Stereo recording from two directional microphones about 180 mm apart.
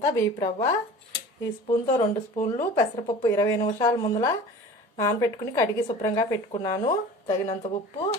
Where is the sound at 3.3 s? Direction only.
20° left (ahead or behind).